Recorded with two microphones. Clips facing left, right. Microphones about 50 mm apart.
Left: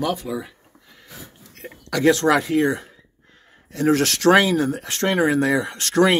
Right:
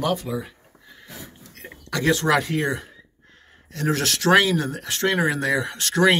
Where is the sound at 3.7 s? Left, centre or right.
Left.